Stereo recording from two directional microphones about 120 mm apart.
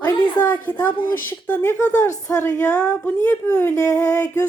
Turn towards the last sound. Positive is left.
turn(degrees=20)  # may be behind; listen again after turning